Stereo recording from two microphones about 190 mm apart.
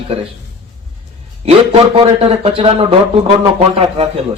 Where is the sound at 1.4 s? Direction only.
30° right (ahead or behind).